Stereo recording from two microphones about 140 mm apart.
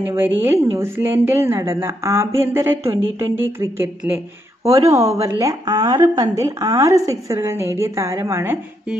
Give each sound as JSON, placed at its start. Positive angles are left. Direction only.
{"t": 0.0, "sound": "a woman's voice", "side_deg": -15}